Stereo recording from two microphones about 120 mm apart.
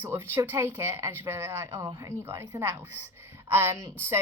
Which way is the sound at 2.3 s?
20° right (ahead or behind).